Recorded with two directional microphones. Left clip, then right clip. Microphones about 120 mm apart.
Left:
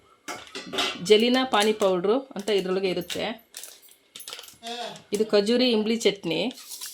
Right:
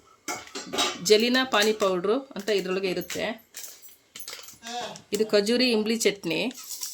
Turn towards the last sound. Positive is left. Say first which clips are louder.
# left 1 dB
turn(degrees=20)  # may be behind; listen again after turning